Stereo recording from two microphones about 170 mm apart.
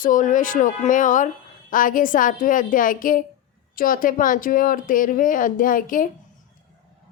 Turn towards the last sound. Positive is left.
turn(degrees=55)  # may be behind; listen again after turning